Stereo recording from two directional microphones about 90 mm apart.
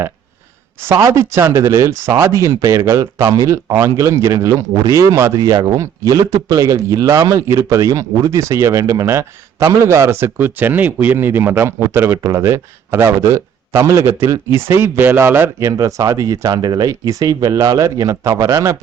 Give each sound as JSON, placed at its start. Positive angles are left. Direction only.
{"t": 0.9, "sound": "a man's voice", "side_deg": -35}
{"t": 5.4, "sound": "a man's voice", "side_deg": -45}